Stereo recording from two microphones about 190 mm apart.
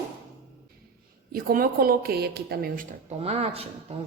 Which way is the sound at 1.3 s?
50° right (ahead or behind).